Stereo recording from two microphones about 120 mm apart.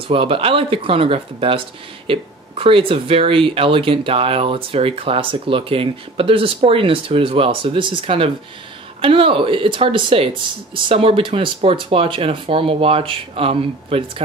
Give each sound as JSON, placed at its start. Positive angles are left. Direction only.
{"t": 0.1, "sound": "speech", "side_deg": -50}